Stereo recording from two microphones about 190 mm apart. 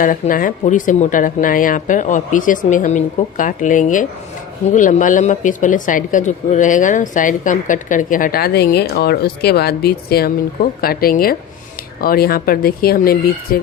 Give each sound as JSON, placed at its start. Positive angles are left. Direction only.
{"t": 0.0, "sound": "speech", "side_deg": 45}